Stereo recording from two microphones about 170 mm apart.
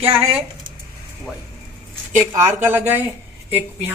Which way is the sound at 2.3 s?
15° right (ahead or behind).